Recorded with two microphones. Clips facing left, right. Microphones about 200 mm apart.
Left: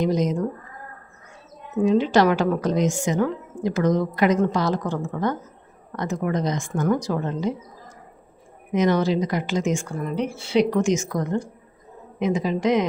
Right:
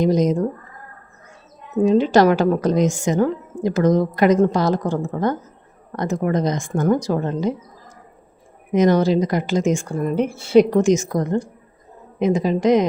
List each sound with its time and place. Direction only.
0.0 s a woman's voice: 40° right (ahead or behind)
1.8 s a woman's voice: 40° right (ahead or behind)
8.7 s a woman's voice: 40° right (ahead or behind)